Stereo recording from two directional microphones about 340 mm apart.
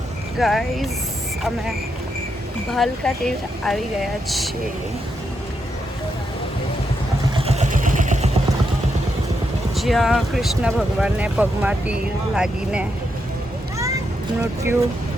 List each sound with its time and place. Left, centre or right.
0.3 s speech: centre
2.7 s speech: centre
7.3 s vehicle: centre
9.7 s speech: centre